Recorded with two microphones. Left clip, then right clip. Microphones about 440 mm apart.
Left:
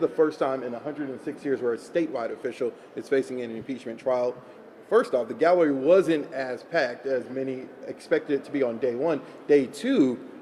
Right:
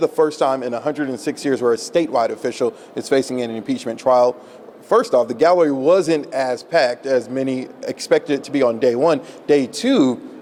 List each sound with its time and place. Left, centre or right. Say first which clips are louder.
0.0 s a man's voice: right 7 dB; right